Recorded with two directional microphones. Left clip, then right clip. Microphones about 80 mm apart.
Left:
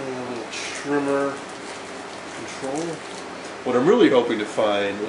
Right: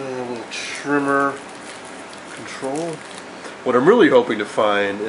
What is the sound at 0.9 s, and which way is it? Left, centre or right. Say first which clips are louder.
Speech: right 4 dB; right.